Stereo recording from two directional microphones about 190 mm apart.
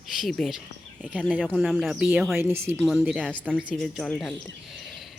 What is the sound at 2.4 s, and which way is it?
Speech, 15° right (ahead or behind).